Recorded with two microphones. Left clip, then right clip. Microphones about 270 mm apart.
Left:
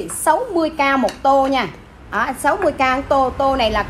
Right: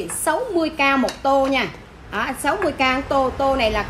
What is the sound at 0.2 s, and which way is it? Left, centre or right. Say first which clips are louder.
A woman's voice: left 4 dB; centre.